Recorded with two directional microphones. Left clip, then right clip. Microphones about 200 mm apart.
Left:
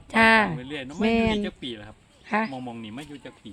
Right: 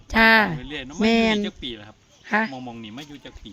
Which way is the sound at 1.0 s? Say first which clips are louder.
Right 4 dB; 20° right (ahead or behind).